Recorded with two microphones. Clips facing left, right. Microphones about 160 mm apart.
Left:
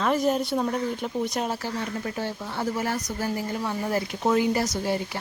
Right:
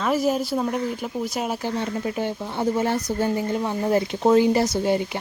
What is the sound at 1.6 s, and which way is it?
Speech, 20° right (ahead or behind).